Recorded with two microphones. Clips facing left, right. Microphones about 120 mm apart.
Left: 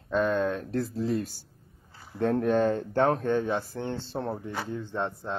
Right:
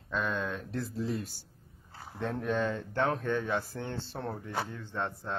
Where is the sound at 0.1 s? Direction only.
45° left (ahead or behind).